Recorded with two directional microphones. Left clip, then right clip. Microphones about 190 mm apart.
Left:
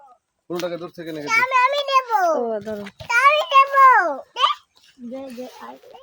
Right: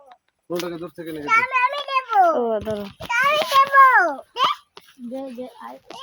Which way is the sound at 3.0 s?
20° left (ahead or behind).